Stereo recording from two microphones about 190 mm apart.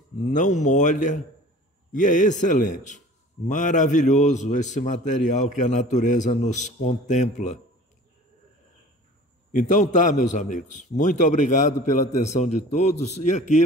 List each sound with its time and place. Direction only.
0.2 s a man's voice: 40° left (ahead or behind)
9.5 s a man's voice: 40° left (ahead or behind)